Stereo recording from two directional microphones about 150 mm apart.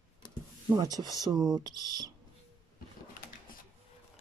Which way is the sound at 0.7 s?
25° right (ahead or behind).